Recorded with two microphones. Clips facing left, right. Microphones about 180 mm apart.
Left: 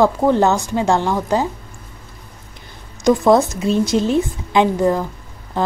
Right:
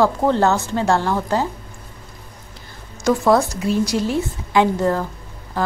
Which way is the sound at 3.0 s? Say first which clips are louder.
Left 3 dB; 20° left (ahead or behind).